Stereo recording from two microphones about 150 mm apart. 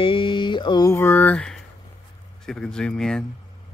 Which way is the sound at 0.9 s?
15° left (ahead or behind).